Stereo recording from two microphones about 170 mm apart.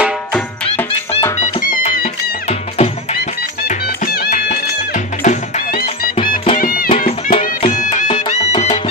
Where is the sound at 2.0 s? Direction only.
35° left (ahead or behind).